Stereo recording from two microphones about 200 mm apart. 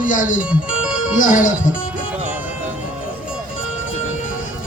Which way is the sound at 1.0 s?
40° left (ahead or behind).